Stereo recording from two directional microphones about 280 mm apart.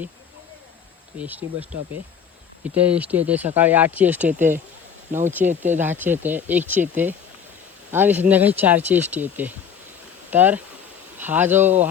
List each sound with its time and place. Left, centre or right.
1.2 s speech: centre
2.6 s speech: centre